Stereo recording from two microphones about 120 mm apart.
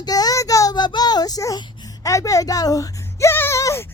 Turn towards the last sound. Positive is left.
turn(degrees=25)  # may be behind; listen again after turning